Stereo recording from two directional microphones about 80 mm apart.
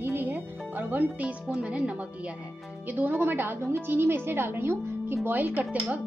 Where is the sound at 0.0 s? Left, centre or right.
Right.